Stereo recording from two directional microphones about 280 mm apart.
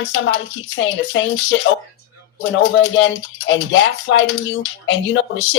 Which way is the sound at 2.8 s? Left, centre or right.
Left.